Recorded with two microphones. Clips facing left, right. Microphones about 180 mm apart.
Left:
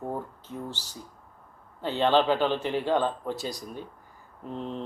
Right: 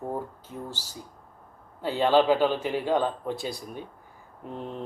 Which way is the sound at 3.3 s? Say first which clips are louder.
Right 1 dB; 40° left (ahead or behind).